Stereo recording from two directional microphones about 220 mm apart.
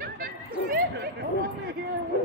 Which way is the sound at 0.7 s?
45° right (ahead or behind).